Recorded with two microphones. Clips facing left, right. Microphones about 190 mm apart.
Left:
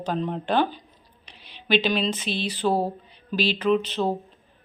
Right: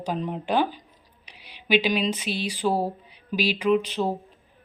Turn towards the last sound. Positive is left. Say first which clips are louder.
# even
turn(degrees=-10)  # may be behind; listen again after turning